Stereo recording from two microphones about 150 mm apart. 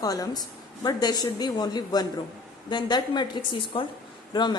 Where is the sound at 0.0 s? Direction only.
25° left (ahead or behind).